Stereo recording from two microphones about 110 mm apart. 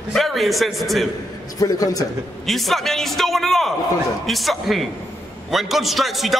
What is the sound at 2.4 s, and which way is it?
A man's voice, centre (ahead or behind).